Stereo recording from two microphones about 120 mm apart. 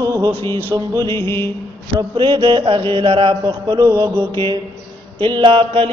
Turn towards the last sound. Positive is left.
turn(degrees=-50)  # may be behind; listen again after turning